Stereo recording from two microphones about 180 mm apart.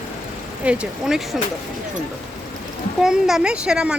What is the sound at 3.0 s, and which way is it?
Speech, 5° right (ahead or behind).